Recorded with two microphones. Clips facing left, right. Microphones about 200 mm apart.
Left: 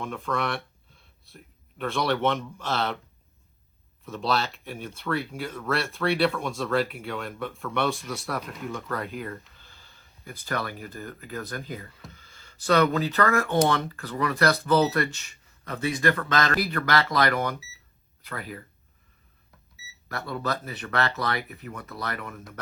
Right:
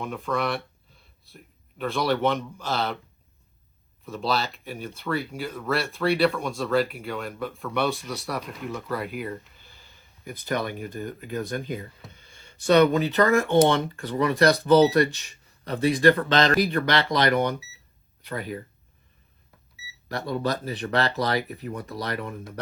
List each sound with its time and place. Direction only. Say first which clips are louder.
0.0 s a sound: right 2 dB; centre (ahead or behind)
1.8 s speech: right 1 dB; centre (ahead or behind)
4.0 s speech: even; centre (ahead or behind); by 18.6 s 30° right (ahead or behind)
20.1 s speech: right 4 dB; 30° right (ahead or behind)